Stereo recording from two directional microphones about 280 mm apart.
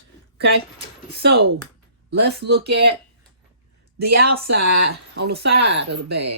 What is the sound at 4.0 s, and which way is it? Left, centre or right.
Speech, right.